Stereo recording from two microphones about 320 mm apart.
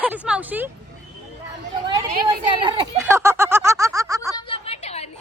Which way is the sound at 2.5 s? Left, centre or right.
Centre.